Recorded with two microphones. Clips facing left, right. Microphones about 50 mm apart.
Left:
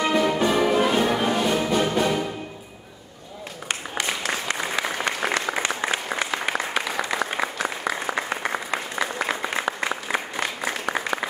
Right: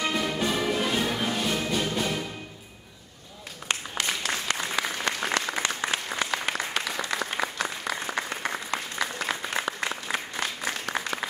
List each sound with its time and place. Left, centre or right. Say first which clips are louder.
0.0 s music: left 7 dB; centre
1.5 s music: left 6 dB; centre
3.9 s applause: left 5 dB; centre